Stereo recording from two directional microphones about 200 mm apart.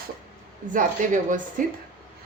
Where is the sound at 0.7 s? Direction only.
40° right (ahead or behind).